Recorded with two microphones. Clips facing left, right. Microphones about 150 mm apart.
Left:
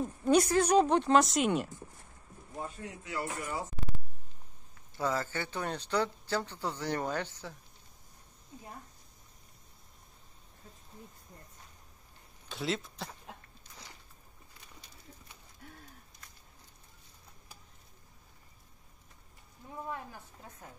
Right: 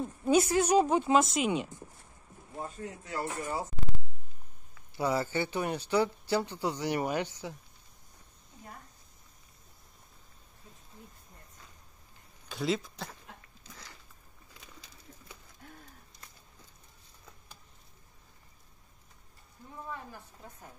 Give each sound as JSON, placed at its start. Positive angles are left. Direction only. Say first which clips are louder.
{"t": 0.2, "sound": "speech", "louder": "even", "side_deg": -5}
{"t": 3.0, "sound": "speech", "louder": "right 1 dB", "side_deg": -40}
{"t": 4.9, "sound": "speech", "louder": "right 3 dB", "side_deg": -15}
{"t": 12.4, "sound": "speech", "louder": "right 3 dB", "side_deg": 0}
{"t": 13.7, "sound": "a sound", "louder": "right 3 dB", "side_deg": -90}